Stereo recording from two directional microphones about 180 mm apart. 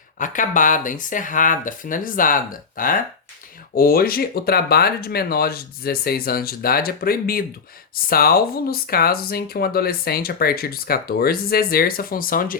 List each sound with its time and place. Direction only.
0.2 s speech: 45° left (ahead or behind)